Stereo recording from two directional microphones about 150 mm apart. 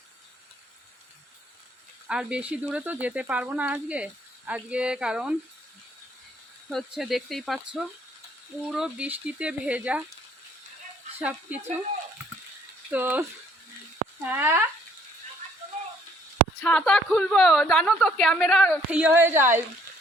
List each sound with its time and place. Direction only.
2.0 s speech: 5° right (ahead or behind)
6.7 s a woman's voice: centre (ahead or behind)
11.2 s speech: 10° right (ahead or behind)
12.9 s speech: 10° right (ahead or behind)
14.3 s speech: 15° right (ahead or behind)
16.6 s a woman's voice: 5° left (ahead or behind)
18.9 s speech: 10° right (ahead or behind)